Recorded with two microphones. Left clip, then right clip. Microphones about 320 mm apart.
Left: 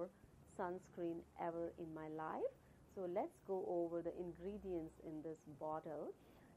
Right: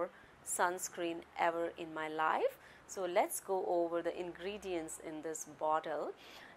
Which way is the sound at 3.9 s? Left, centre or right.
Centre.